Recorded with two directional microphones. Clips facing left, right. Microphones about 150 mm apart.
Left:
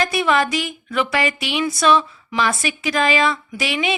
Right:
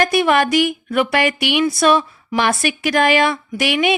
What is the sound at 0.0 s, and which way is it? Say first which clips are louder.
A woman's voice: right 3 dB; 60° right (ahead or behind).